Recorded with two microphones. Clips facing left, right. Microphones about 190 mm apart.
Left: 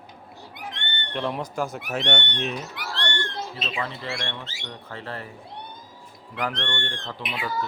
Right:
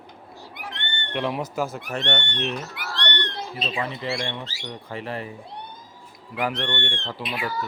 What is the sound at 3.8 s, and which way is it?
Speech, 15° right (ahead or behind).